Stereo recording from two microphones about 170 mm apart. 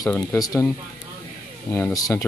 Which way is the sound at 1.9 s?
20° left (ahead or behind).